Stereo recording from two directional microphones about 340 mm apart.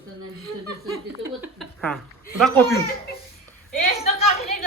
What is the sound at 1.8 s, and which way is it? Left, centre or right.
Speech, centre.